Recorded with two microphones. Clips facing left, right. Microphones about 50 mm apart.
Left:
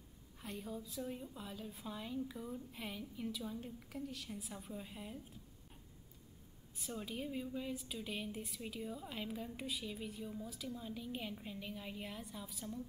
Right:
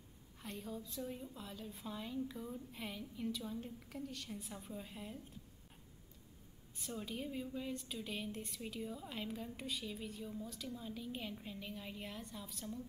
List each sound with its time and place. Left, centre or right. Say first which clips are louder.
0.4 s a woman's voice: left 1 dB; centre
6.7 s a woman's voice: even; centre